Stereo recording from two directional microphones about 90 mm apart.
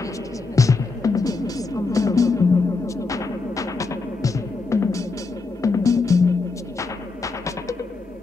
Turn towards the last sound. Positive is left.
turn(degrees=35)  # may be behind; listen again after turning